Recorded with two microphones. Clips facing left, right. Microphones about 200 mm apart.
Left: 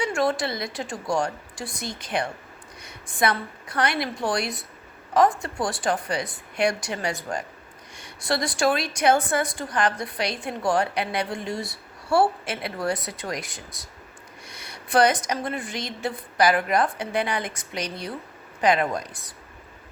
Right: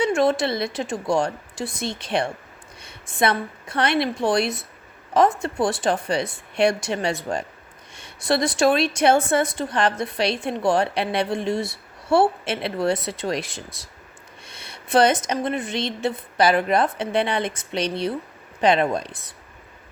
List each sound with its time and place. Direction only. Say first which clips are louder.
0.0 s a woman's voice: right 5 dB; 20° right (ahead or behind)